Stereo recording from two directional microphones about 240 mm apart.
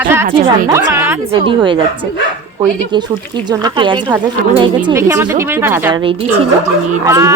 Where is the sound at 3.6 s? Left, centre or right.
Centre.